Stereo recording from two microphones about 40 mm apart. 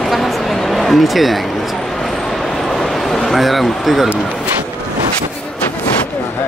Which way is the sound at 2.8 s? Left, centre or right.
Centre.